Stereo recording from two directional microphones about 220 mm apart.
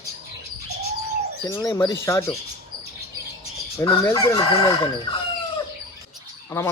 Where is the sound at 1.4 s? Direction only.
15° left (ahead or behind).